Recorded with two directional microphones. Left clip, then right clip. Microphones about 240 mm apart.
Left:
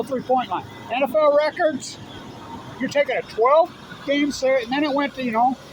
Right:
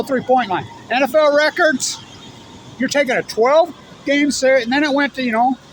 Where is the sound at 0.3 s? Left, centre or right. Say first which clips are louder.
Right 6 dB; right.